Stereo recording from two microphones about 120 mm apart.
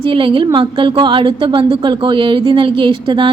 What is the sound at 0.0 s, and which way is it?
A woman's voice, 45° right (ahead or behind).